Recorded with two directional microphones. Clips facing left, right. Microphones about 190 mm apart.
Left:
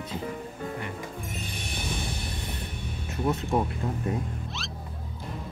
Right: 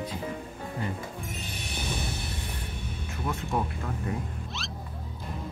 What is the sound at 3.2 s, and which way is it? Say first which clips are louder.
Speech: left 5 dB; 20° left (ahead or behind).